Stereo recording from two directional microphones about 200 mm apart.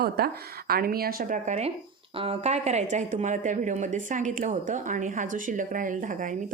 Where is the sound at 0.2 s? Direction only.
50° right (ahead or behind).